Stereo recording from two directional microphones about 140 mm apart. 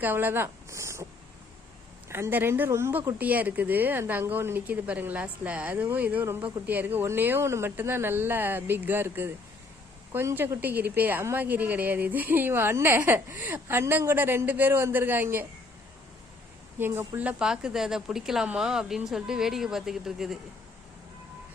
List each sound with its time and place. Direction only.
0.0 s speech: 15° right (ahead or behind)
2.0 s a woman's voice: 20° right (ahead or behind)
16.7 s a woman's voice: 15° right (ahead or behind)